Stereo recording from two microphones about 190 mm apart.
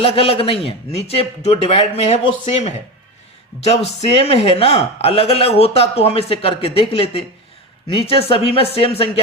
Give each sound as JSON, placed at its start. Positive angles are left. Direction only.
{"t": 0.0, "sound": "a man's voice", "side_deg": 30}